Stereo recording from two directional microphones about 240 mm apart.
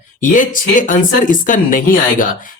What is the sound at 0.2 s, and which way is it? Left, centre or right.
Speech, left.